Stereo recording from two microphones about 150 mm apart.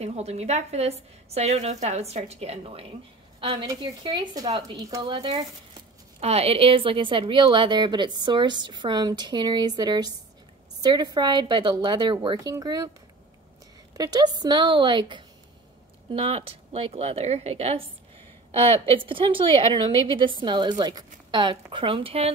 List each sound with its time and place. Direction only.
0.0 s a woman's voice: 45° right (ahead or behind)
6.2 s a woman's voice: 40° right (ahead or behind); by 12.9 s 25° right (ahead or behind)
13.9 s a woman's voice: 25° right (ahead or behind)